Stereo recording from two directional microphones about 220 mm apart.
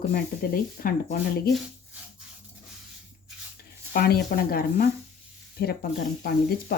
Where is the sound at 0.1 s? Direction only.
40° left (ahead or behind).